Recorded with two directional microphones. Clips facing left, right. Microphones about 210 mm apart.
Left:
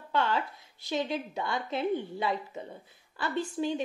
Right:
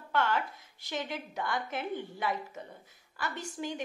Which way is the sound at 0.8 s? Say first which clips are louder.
Left 6 dB; 20° left (ahead or behind).